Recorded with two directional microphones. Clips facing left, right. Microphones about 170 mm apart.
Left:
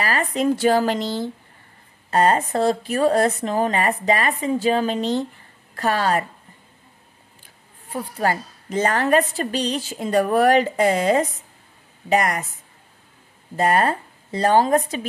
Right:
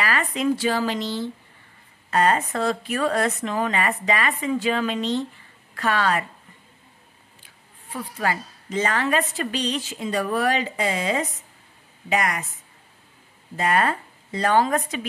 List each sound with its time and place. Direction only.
0.0 s speech: 40° left (ahead or behind)
2.0 s speech: 35° left (ahead or behind)
7.4 s a woman's voice: 45° left (ahead or behind)
10.0 s speech: 50° left (ahead or behind)
13.6 s speech: 40° left (ahead or behind)